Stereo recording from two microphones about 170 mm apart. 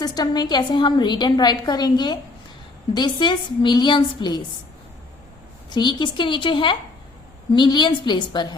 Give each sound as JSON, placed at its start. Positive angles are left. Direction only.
{"t": 0.0, "sound": "a woman's voice", "side_deg": 25}
{"t": 5.7, "sound": "a woman's voice", "side_deg": 25}